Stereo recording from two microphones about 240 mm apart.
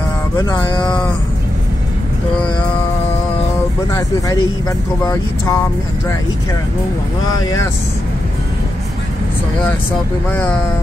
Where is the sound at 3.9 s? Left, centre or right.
Centre.